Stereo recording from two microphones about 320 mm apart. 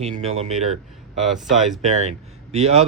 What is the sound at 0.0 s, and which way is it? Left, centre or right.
Speech, centre.